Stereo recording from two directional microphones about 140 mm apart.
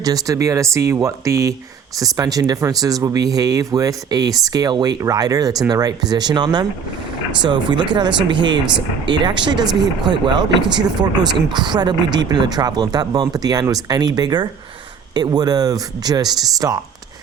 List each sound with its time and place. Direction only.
0.0 s speech: 25° right (ahead or behind)
11.5 s speech: 30° right (ahead or behind)